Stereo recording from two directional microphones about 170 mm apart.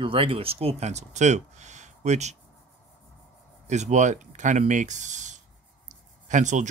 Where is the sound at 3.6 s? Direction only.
45° right (ahead or behind).